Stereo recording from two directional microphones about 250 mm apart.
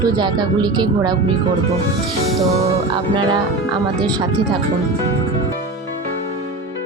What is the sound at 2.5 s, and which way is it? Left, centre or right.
Speech, right.